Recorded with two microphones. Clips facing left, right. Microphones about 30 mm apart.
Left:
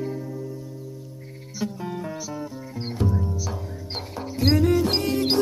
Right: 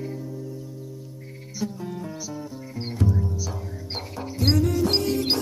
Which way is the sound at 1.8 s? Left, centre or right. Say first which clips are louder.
Left 2 dB; left.